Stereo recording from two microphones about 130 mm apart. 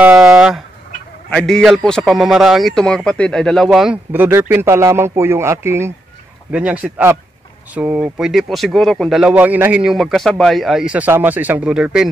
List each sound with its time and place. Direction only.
0.0 s fowl: 5° right (ahead or behind)
1.3 s a man's voice: centre (ahead or behind)
4.1 s a man's voice: 15° right (ahead or behind)
8.2 s a man's voice: centre (ahead or behind)
9.3 s speech: 10° right (ahead or behind)